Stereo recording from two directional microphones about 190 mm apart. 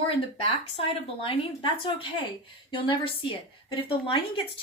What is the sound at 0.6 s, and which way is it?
A woman's voice, 30° left (ahead or behind).